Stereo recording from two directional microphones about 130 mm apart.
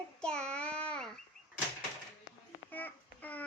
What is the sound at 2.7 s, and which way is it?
Babbling, 15° left (ahead or behind).